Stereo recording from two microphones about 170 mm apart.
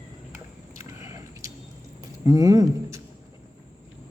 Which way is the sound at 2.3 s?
20° right (ahead or behind).